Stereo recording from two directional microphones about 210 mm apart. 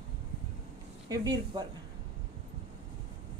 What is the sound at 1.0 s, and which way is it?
Speech, 20° right (ahead or behind).